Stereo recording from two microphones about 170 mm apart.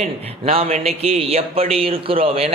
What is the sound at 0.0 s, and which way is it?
A man's voice, 35° right (ahead or behind).